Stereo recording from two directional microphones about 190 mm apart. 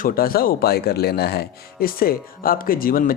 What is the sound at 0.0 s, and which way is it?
Speech, 50° left (ahead or behind).